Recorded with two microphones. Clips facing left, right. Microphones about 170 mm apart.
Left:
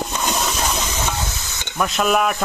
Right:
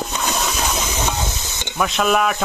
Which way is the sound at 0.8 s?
15° right (ahead or behind).